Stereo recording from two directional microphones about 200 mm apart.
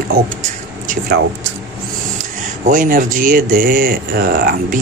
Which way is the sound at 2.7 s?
40° right (ahead or behind).